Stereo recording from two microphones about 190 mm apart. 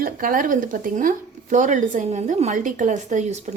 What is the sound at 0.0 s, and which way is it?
A woman's voice, 45° right (ahead or behind).